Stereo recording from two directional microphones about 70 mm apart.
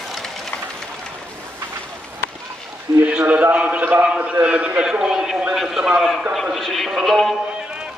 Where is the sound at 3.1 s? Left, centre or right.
Centre.